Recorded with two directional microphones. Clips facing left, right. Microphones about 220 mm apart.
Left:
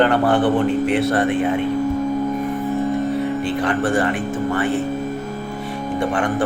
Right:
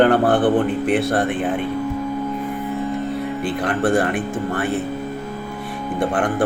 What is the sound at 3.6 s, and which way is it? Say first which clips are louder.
Speech: right 2 dB; 55° right (ahead or behind).